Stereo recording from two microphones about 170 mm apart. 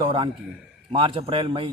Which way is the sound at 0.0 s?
30° right (ahead or behind).